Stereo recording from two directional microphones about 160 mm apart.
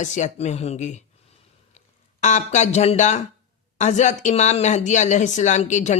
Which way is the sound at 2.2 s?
50° left (ahead or behind).